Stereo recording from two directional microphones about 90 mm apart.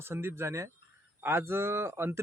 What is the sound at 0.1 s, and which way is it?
Speech, 25° right (ahead or behind).